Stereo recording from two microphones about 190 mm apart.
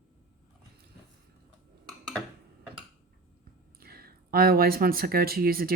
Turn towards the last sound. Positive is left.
turn(degrees=-50)  # may be behind; listen again after turning